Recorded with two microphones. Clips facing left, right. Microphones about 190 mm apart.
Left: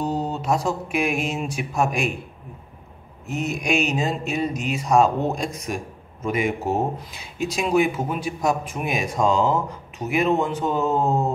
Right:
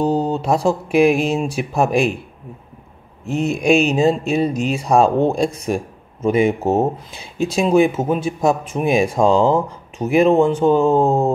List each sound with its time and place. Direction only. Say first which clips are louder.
0.0 s speech: right 7 dB; 30° right (ahead or behind)
3.3 s speech: right 8 dB; 30° right (ahead or behind)